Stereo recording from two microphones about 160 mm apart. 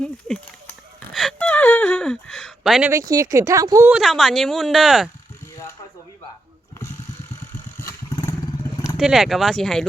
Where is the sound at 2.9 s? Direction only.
20° right (ahead or behind).